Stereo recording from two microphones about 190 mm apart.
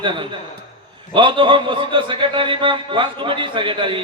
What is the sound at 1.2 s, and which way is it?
A man's voice, 25° right (ahead or behind).